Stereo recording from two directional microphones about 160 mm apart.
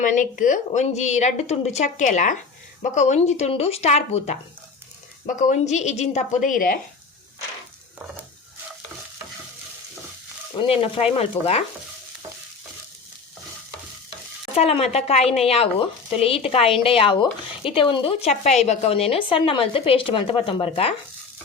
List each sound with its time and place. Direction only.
0.0 s speech: 55° left (ahead or behind)
10.6 s speech: 35° left (ahead or behind)
14.5 s speech: 40° left (ahead or behind)